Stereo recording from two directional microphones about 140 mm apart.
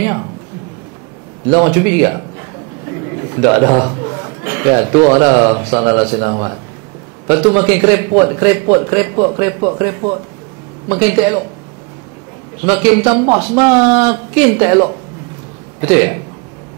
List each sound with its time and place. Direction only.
1.5 s speech: 20° right (ahead or behind)
3.4 s a man's voice: 20° right (ahead or behind)
12.6 s speech: 15° right (ahead or behind)